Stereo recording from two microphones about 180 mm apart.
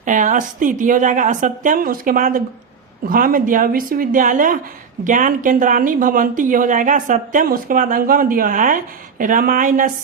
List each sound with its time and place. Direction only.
0.0 s speech: 45° right (ahead or behind)